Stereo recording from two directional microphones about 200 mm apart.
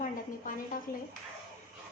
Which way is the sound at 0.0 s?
40° left (ahead or behind).